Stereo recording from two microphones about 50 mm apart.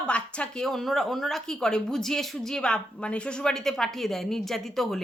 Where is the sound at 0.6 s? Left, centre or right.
Centre.